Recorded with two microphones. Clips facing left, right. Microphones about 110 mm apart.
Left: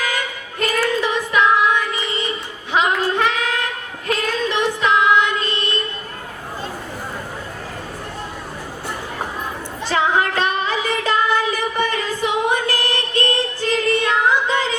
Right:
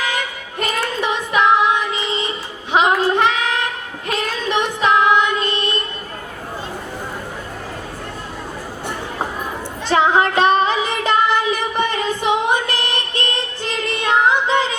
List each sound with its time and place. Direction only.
0.6 s child singing: 20° right (ahead or behind)
9.9 s music: 20° right (ahead or behind)